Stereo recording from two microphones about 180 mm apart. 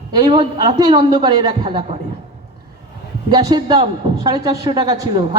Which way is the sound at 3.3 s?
25° right (ahead or behind).